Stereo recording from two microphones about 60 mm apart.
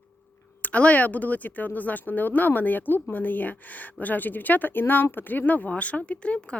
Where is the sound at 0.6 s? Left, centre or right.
Left.